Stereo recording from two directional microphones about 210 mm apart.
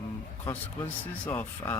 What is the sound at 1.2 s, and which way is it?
Speech, 10° left (ahead or behind).